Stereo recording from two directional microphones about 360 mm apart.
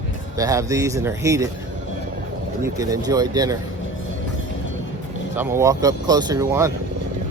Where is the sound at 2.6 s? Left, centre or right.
Centre.